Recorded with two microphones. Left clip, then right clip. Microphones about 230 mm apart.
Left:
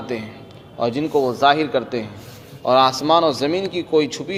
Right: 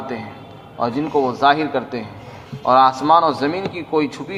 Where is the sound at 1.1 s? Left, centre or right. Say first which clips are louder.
Right 1 dB; left.